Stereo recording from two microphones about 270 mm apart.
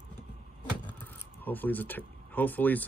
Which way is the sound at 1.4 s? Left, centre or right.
Centre.